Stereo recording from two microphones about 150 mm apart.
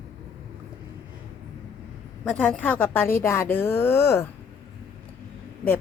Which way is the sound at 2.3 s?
5° left (ahead or behind).